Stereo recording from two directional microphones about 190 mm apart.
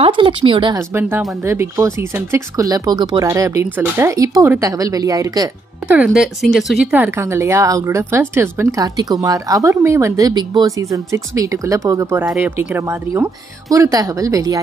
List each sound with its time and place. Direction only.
0.0 s speech: 25° right (ahead or behind)
0.7 s a woman's voice: 10° right (ahead or behind)
5.9 s a woman's voice: 5° right (ahead or behind)